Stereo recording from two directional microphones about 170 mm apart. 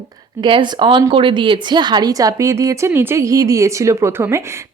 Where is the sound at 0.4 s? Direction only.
30° right (ahead or behind).